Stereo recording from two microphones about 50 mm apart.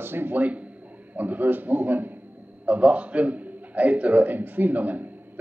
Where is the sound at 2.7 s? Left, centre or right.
Right.